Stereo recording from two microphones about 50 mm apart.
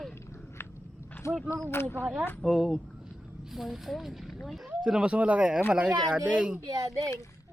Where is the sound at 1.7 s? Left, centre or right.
Left.